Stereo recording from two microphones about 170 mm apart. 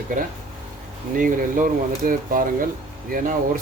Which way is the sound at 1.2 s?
55° right (ahead or behind).